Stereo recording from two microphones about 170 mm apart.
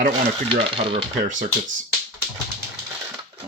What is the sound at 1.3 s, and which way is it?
Speech, 50° right (ahead or behind).